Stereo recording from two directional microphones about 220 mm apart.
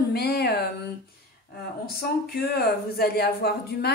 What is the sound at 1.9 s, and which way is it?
Speech, 45° left (ahead or behind).